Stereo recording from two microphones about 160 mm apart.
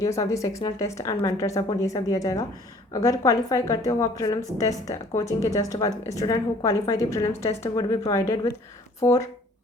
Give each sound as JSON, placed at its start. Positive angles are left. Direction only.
{"t": 0.0, "sound": "a woman's voice", "side_deg": 20}